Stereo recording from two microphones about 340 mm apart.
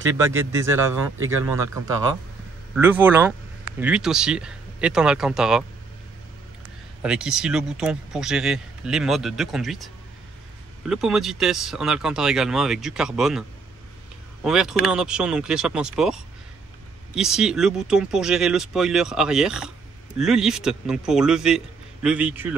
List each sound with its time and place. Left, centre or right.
0.2 s speech: centre
2.7 s speech: centre
7.0 s speech: centre
10.9 s speech: centre